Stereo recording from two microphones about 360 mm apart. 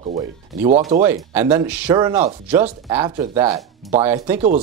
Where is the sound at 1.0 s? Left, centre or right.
Centre.